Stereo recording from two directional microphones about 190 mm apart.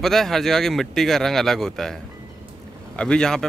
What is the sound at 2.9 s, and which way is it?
Speech, 5° left (ahead or behind).